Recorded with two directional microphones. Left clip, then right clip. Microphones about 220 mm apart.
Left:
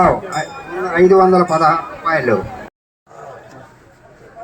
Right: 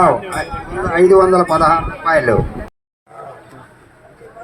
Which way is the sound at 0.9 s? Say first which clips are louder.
Even; 35° right (ahead or behind).